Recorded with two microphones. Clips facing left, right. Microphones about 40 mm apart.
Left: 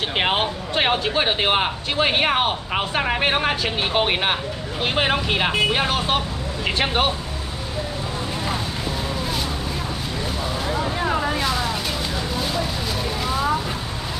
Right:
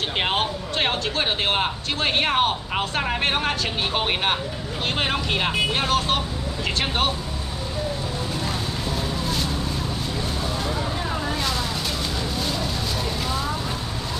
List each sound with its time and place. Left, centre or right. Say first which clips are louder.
0.2 s speech: left 3 dB; centre
11.0 s vehicle: left 5 dB; left
11.3 s vehicle: left 3 dB; centre
12.4 s a sound: left 2 dB; centre